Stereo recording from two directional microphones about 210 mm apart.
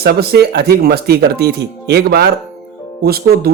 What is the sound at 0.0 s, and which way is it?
Speech, 50° right (ahead or behind).